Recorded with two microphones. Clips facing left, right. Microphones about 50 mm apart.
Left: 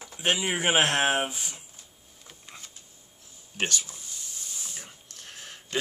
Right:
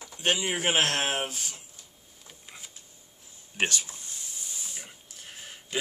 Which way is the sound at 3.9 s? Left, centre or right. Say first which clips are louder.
Even; centre.